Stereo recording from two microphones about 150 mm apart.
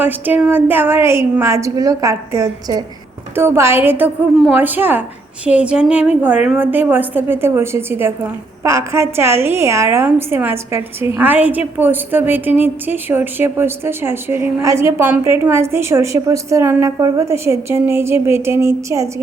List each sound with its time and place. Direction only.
0.0 s a woman's voice: 10° right (ahead or behind)